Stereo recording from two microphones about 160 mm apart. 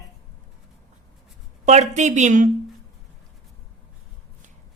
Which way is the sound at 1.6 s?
45° right (ahead or behind).